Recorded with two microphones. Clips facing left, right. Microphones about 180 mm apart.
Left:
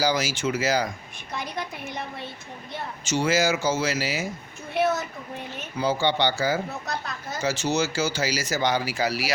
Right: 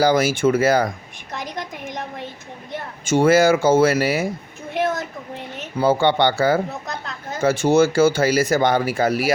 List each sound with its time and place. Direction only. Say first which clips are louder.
0.0 s speech: right 8 dB; 55° right (ahead or behind)
1.5 s a woman's voice: right 3 dB; 15° right (ahead or behind)
3.0 s speech: right 9 dB; 55° right (ahead or behind)
5.7 s speech: right 7 dB; 55° right (ahead or behind)